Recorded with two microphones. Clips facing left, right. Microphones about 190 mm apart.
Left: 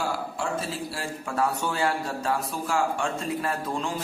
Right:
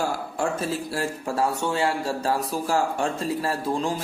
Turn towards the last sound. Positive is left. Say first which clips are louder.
# right 4 dB
turn(degrees=-30)  # may be behind; listen again after turning